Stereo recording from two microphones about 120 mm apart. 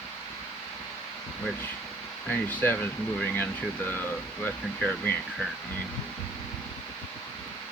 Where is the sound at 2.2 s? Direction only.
15° left (ahead or behind).